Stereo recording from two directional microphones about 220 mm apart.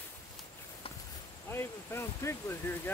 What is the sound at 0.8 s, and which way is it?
Walk, 25° left (ahead or behind).